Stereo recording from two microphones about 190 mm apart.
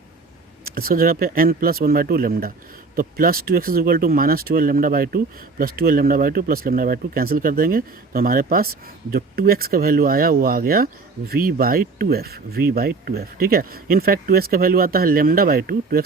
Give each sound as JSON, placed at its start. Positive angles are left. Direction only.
{"t": 0.6, "sound": "speech", "side_deg": -50}